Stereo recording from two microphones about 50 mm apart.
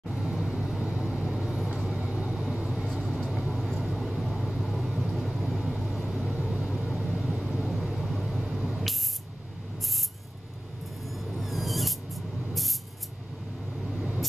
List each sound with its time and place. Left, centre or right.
0.1 s vehicle: centre
1.9 s vehicle: centre
2.8 s vehicle: centre
6.3 s vehicle: centre
6.8 s vehicle: centre
7.6 s vehicle: centre
11.1 s a sound: centre